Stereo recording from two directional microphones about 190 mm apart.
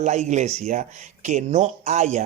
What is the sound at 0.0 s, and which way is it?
Speech, 40° right (ahead or behind).